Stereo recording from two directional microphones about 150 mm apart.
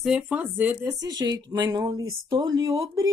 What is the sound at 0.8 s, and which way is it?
Speech, 25° right (ahead or behind).